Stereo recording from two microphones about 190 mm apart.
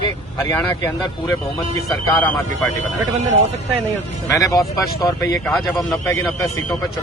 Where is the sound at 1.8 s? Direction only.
5° left (ahead or behind).